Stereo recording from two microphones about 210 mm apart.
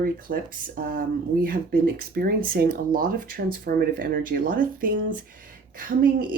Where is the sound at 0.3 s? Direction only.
45° right (ahead or behind).